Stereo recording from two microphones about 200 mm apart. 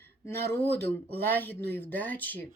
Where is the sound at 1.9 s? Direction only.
10° left (ahead or behind).